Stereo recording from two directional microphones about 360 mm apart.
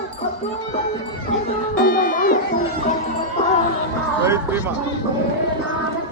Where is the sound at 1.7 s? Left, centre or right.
Left.